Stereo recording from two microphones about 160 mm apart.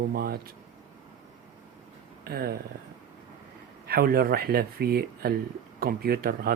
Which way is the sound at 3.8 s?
70° right (ahead or behind).